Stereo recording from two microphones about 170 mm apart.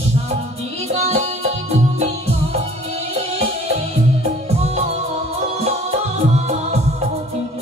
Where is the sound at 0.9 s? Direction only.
40° right (ahead or behind).